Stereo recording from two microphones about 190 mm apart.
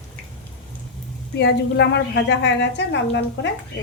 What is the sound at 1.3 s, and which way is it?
A woman's voice, 65° left (ahead or behind).